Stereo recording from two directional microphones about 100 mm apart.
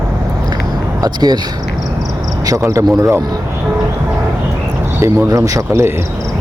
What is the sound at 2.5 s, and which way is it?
Speech, 35° right (ahead or behind).